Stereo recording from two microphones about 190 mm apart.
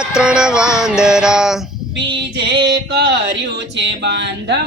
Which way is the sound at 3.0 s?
65° right (ahead or behind).